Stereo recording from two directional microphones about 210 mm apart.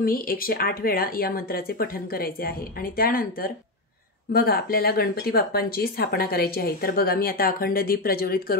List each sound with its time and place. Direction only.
0.0 s speech: 45° left (ahead or behind)